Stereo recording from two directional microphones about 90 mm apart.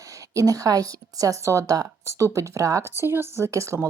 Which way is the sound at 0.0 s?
40° right (ahead or behind).